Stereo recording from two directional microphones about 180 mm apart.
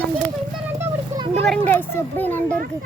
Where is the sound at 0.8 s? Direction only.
20° right (ahead or behind).